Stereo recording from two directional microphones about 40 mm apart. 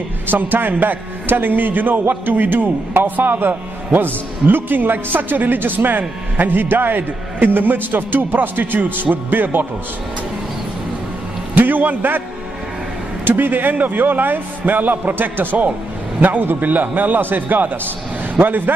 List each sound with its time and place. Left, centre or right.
0.3 s a man's voice: right
11.5 s a sound: right
13.2 s a man's voice: right